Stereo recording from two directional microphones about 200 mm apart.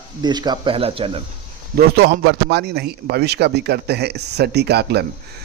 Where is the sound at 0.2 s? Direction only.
20° right (ahead or behind).